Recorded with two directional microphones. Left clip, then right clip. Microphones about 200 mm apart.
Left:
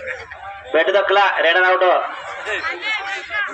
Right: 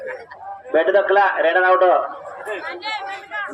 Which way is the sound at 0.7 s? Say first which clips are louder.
Even; 50° right (ahead or behind).